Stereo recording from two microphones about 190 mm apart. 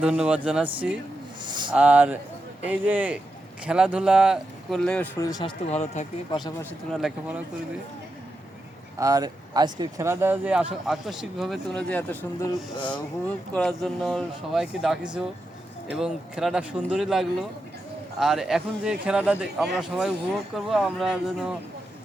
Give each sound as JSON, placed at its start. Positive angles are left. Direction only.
{"t": 0.0, "sound": "speech", "side_deg": -5}
{"t": 1.5, "sound": "a sound", "side_deg": -25}
{"t": 1.7, "sound": "speech", "side_deg": -5}
{"t": 5.2, "sound": "speech", "side_deg": 20}
{"t": 5.7, "sound": "speech", "side_deg": 35}
{"t": 6.9, "sound": "speech", "side_deg": -5}
{"t": 9.0, "sound": "speech", "side_deg": -20}
{"t": 13.5, "sound": "speech", "side_deg": 5}